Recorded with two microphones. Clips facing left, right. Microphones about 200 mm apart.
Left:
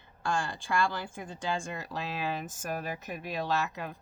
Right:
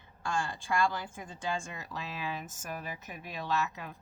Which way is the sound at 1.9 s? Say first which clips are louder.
Left 4 dB; 70° left (ahead or behind).